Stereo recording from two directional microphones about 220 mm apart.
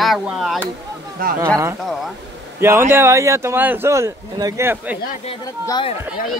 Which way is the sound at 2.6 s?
10° right (ahead or behind).